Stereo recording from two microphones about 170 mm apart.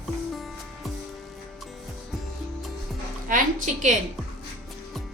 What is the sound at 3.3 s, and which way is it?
Speech, 50° right (ahead or behind).